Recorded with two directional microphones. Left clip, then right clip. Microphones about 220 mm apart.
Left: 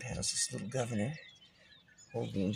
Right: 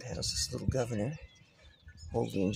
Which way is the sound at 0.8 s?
15° right (ahead or behind).